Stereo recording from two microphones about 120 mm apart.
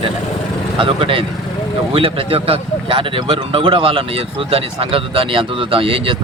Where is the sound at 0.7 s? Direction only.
45° right (ahead or behind).